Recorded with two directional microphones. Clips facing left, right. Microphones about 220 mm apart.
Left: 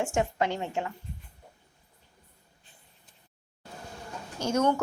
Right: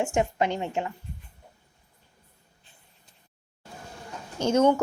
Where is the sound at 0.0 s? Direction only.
15° right (ahead or behind).